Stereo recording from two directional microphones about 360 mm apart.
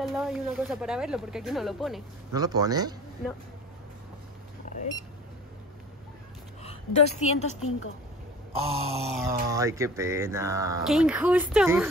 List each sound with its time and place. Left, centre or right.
0.0 s speech: centre
4.6 s a sound: centre
6.6 s a woman's voice: centre
8.5 s speech: centre